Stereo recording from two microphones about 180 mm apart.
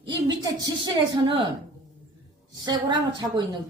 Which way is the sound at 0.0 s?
25° right (ahead or behind).